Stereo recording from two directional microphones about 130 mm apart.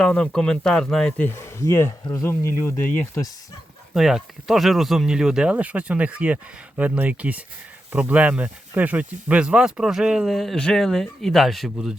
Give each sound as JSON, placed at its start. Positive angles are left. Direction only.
{"t": 0.0, "sound": "speech", "side_deg": 5}
{"t": 1.3, "sound": "speech", "side_deg": 20}
{"t": 3.9, "sound": "speech", "side_deg": -5}